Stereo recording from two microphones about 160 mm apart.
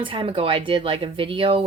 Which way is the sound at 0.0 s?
35° right (ahead or behind).